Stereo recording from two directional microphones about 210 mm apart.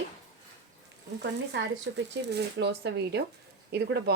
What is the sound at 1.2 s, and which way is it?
Speech, 55° right (ahead or behind).